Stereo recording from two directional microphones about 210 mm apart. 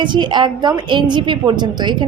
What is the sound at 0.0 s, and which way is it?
A woman's voice, 20° right (ahead or behind).